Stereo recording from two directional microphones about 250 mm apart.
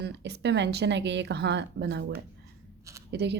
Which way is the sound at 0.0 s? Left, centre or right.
Right.